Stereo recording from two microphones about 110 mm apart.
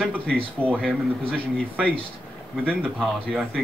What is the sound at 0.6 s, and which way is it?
Speech, 15° right (ahead or behind).